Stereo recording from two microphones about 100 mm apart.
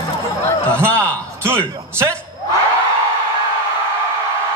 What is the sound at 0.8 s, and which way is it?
Speech, 25° right (ahead or behind).